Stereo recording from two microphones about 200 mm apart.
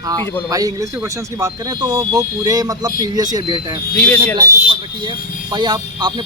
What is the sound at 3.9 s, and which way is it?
Speech, 10° left (ahead or behind).